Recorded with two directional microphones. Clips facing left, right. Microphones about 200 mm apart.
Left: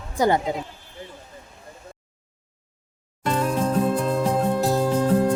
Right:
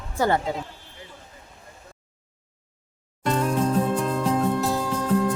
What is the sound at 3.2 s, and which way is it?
Music, 5° left (ahead or behind).